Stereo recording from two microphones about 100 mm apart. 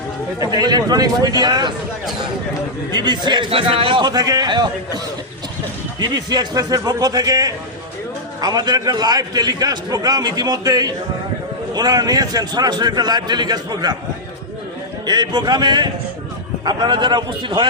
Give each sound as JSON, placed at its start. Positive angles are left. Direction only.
{"t": 0.3, "sound": "a man's voice", "side_deg": -40}
{"t": 2.9, "sound": "a man's voice", "side_deg": -45}
{"t": 3.5, "sound": "a man's voice", "side_deg": -65}
{"t": 4.0, "sound": "a man's voice", "side_deg": -40}
{"t": 6.0, "sound": "a man's voice", "side_deg": -45}
{"t": 15.0, "sound": "a man's voice", "side_deg": -45}